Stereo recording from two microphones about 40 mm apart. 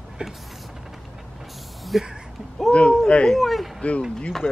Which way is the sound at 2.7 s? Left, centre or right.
Left.